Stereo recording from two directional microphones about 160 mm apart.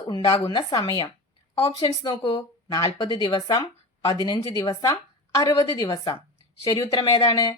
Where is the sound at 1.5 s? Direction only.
35° left (ahead or behind).